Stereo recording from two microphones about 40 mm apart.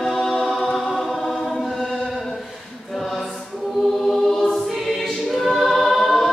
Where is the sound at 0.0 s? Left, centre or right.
Centre.